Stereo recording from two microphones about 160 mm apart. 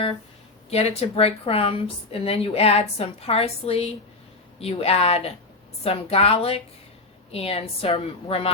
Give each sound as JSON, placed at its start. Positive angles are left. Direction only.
{"t": 0.7, "sound": "a woman's voice", "side_deg": 40}